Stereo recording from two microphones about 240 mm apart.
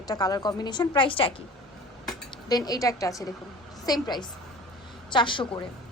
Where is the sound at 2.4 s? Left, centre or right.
Centre.